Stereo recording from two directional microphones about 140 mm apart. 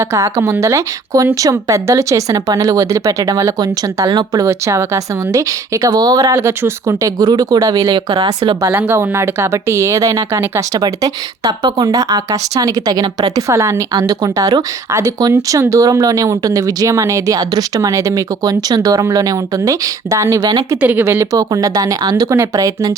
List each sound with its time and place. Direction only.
0.0 s speech: 20° right (ahead or behind)
6.3 s speech: 15° right (ahead or behind); by 8.3 s 40° right (ahead or behind)
8.4 s speech: 25° right (ahead or behind)
20.8 s speech: 15° right (ahead or behind)